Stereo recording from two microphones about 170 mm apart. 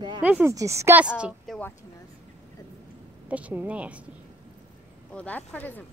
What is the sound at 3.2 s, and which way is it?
Speech, 10° right (ahead or behind).